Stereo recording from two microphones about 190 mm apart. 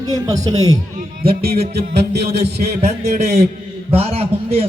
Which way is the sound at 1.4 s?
55° right (ahead or behind).